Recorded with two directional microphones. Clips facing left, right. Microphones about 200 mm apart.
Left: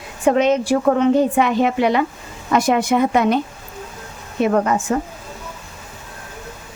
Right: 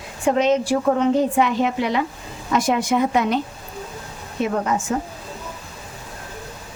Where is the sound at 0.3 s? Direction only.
60° left (ahead or behind).